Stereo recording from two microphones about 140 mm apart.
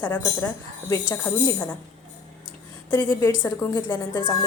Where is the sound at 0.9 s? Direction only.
25° left (ahead or behind).